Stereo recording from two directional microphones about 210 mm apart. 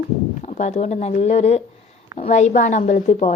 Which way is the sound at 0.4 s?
35° left (ahead or behind).